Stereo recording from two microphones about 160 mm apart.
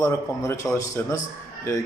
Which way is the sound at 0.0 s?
20° left (ahead or behind).